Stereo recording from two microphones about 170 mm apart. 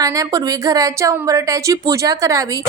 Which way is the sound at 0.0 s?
20° right (ahead or behind).